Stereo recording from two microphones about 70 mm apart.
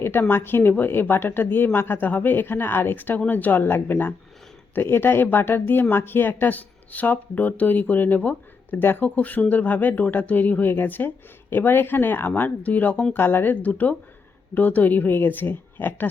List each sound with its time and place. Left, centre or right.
0.0 s speech: left